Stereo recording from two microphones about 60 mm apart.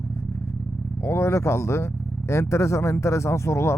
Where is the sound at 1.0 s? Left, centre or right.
Left.